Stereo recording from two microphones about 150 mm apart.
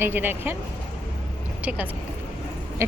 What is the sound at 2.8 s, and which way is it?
Owl, 15° right (ahead or behind).